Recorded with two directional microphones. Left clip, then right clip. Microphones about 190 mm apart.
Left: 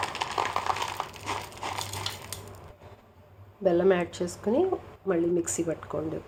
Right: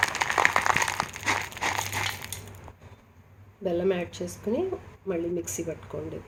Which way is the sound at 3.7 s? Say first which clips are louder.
Left 4 dB; 5° left (ahead or behind).